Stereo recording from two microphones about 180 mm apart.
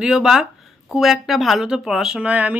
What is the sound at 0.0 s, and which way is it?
Speech, 5° right (ahead or behind).